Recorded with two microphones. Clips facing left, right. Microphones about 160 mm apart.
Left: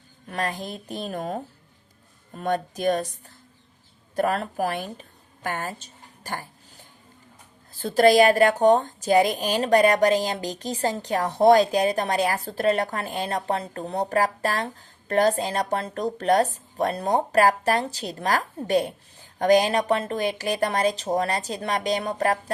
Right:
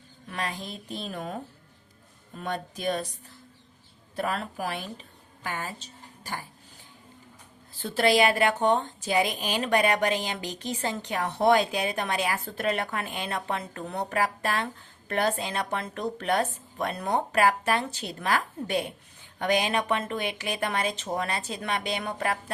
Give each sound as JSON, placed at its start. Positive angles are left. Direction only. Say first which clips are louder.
{"t": 0.3, "sound": "speech", "louder": "left 5 dB", "side_deg": 45}
{"t": 4.1, "sound": "a woman's voice", "louder": "left 6 dB", "side_deg": 45}
{"t": 7.8, "sound": "a woman's voice", "louder": "left 6 dB", "side_deg": 40}